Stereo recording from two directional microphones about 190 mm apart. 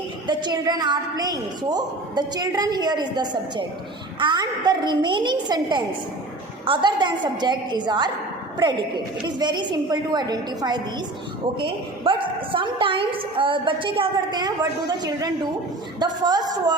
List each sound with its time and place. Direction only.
0.3 s a woman's voice: 25° right (ahead or behind)
9.2 s a woman's voice: 25° right (ahead or behind)
12.0 s a woman's voice: 25° right (ahead or behind)